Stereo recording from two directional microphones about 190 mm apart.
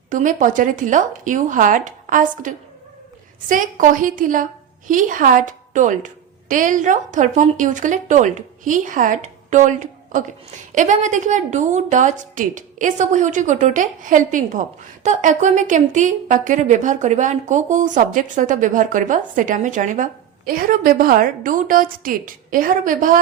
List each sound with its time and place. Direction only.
0.1 s a woman's voice: 40° right (ahead or behind)